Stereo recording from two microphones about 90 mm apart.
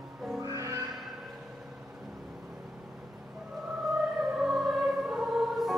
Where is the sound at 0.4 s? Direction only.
40° right (ahead or behind).